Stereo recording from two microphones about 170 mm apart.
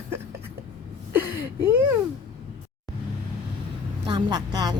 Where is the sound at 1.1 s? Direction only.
10° right (ahead or behind).